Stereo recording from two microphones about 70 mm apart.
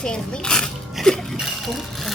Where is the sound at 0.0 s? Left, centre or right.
Centre.